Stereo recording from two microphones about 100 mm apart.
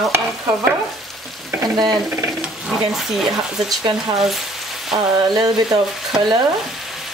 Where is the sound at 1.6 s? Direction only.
40° right (ahead or behind).